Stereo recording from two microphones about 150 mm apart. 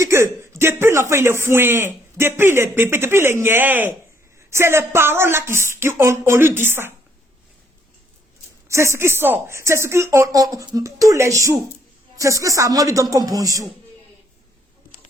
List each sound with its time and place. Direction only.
0.0 s a man's voice: 20° right (ahead or behind)
8.6 s a woman's voice: 20° right (ahead or behind)